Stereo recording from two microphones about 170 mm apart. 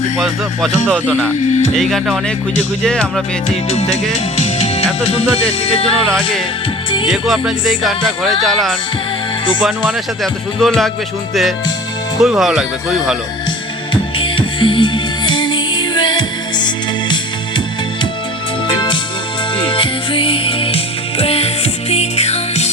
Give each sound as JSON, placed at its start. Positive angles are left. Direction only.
{"t": 0.9, "sound": "speech", "side_deg": -10}
{"t": 1.7, "sound": "music", "side_deg": 0}
{"t": 3.5, "sound": "music", "side_deg": 40}
{"t": 7.1, "sound": "music", "side_deg": -5}
{"t": 12.2, "sound": "music", "side_deg": -5}
{"t": 13.9, "sound": "music", "side_deg": 30}
{"t": 18.7, "sound": "music", "side_deg": 25}